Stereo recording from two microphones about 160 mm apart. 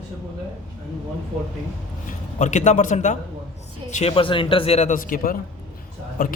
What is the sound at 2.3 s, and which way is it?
A man's voice, 50° left (ahead or behind).